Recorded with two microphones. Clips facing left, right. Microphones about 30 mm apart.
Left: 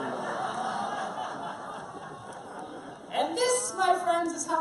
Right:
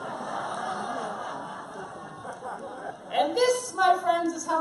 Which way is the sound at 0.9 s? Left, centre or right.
Centre.